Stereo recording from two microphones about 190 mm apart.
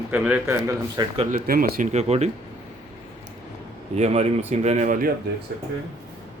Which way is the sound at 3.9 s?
35° right (ahead or behind).